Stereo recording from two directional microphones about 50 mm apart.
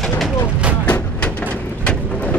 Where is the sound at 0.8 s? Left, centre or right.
Left.